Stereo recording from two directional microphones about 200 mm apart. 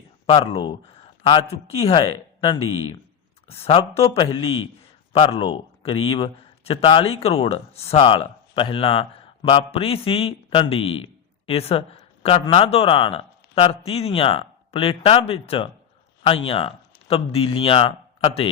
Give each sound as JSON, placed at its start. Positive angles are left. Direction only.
{"t": 1.2, "sound": "a man's voice", "side_deg": 25}